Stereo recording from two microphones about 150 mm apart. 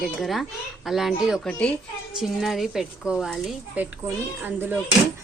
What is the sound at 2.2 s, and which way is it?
Speech, centre (ahead or behind).